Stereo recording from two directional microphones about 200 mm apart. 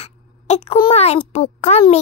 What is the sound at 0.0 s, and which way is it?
A child's voice, 30° left (ahead or behind).